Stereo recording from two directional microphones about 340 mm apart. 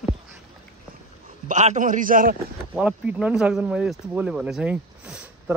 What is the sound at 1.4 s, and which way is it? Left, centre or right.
Speech, right.